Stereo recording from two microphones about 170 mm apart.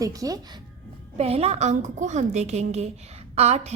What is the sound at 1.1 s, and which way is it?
A woman's voice, 35° right (ahead or behind).